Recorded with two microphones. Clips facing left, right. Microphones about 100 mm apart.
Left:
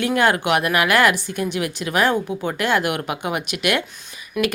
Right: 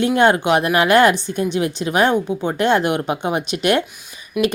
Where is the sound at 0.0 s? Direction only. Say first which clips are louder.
Right 4 dB; 25° right (ahead or behind).